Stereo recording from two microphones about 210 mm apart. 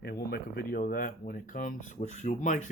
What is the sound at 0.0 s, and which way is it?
Speech, 50° left (ahead or behind).